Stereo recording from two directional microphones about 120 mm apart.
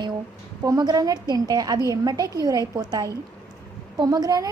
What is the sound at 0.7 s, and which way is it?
A woman's voice, 35° right (ahead or behind).